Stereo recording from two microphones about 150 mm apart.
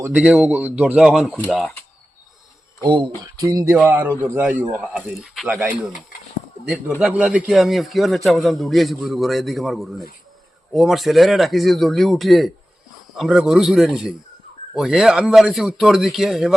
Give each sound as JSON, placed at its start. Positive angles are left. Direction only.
{"t": 0.0, "sound": "a man's voice", "side_deg": -10}
{"t": 2.8, "sound": "speech", "side_deg": -30}
{"t": 3.8, "sound": "speech", "side_deg": -15}
{"t": 7.0, "sound": "a man's voice", "side_deg": -10}